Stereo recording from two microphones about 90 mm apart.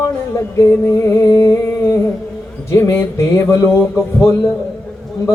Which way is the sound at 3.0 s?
35° left (ahead or behind).